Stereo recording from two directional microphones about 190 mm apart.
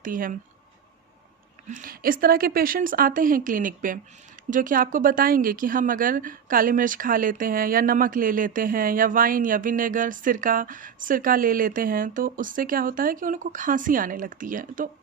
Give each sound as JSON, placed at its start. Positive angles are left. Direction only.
{"t": 0.0, "sound": "a woman's voice", "side_deg": -45}
{"t": 1.7, "sound": "a woman's voice", "side_deg": -45}